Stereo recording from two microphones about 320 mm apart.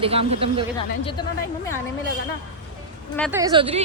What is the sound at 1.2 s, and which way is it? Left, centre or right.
Speech, centre.